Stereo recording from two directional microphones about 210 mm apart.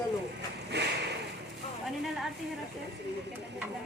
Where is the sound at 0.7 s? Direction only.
55° right (ahead or behind).